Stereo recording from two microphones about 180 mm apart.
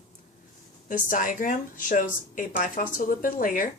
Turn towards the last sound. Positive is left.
turn(degrees=50)  # may be behind; listen again after turning